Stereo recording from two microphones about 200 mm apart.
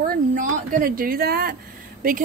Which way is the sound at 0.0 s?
45° right (ahead or behind).